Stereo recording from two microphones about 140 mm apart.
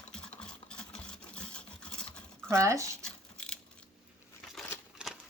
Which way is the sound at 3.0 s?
5° left (ahead or behind).